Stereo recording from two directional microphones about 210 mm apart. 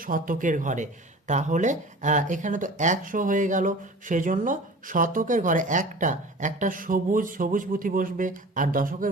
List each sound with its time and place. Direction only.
0.0 s speech: 40° right (ahead or behind)